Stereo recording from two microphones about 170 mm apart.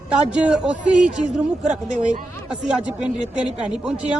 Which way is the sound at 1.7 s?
45° right (ahead or behind).